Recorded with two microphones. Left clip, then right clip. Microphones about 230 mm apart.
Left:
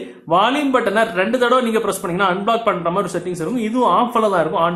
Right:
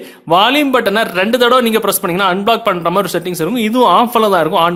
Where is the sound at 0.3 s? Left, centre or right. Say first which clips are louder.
Right 5 dB; right.